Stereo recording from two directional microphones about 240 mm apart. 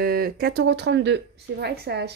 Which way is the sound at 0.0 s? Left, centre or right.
Right.